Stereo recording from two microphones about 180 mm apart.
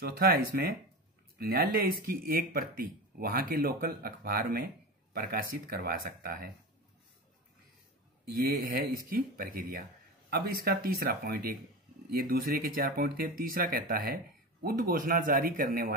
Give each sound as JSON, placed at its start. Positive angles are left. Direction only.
{"t": 0.0, "sound": "speech", "side_deg": -60}
{"t": 8.6, "sound": "speech", "side_deg": -50}